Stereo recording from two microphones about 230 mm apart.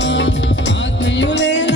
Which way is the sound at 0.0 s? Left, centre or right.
Left.